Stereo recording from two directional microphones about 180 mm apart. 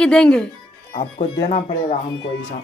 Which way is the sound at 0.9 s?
30° left (ahead or behind).